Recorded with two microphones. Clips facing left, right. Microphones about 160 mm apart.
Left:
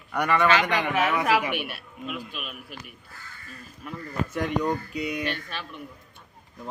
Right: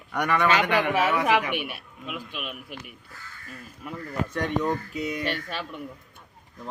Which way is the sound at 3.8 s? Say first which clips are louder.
Right 1 dB; 20° right (ahead or behind).